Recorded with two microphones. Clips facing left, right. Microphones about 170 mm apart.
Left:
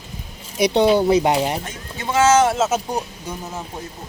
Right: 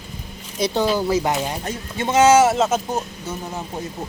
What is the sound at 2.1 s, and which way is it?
Speech, 15° right (ahead or behind).